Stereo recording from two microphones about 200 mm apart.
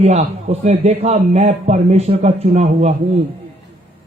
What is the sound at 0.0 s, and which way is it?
A man's voice, 35° right (ahead or behind).